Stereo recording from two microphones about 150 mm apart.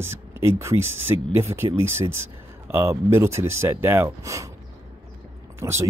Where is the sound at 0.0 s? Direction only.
15° right (ahead or behind).